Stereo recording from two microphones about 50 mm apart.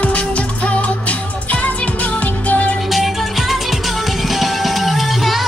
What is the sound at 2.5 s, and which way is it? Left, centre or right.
Music, left.